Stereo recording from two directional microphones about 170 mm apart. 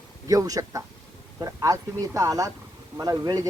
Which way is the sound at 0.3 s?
20° right (ahead or behind).